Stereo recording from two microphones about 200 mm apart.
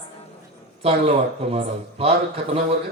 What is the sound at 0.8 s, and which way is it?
Speech, 30° right (ahead or behind).